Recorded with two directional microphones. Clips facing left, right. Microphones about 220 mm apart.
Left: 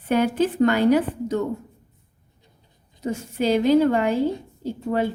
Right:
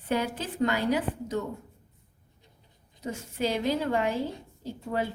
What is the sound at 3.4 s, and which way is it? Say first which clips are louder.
Speech: left 10 dB; 75° left (ahead or behind).